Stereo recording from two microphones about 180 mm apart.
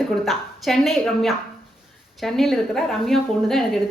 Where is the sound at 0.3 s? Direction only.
Centre (ahead or behind).